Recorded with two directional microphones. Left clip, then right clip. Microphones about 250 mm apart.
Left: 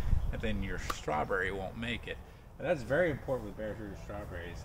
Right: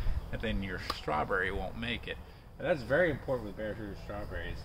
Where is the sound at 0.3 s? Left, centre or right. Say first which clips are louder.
Right 2 dB; centre.